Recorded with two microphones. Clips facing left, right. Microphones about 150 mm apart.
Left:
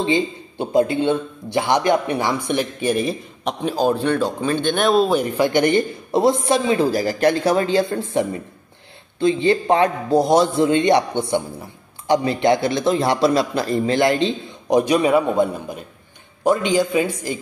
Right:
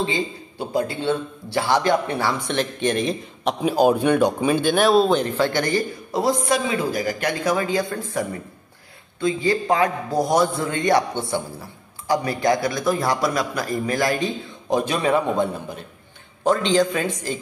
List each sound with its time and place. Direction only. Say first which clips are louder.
0.6 s speech: left 6 dB; 20° left (ahead or behind); by 3.5 s 5° left (ahead or behind)
3.6 s speech: right 2 dB; 10° right (ahead or behind); by 17.4 s 10° left (ahead or behind)